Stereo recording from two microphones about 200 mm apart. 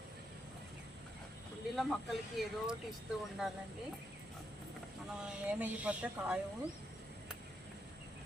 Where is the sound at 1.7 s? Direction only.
Centre (ahead or behind).